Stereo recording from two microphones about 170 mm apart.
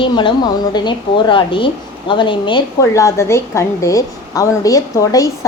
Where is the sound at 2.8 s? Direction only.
15° left (ahead or behind).